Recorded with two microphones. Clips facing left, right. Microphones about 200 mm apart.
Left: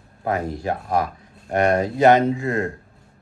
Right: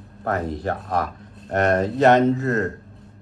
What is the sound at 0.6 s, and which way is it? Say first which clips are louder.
Speech: left 2 dB; 10° left (ahead or behind).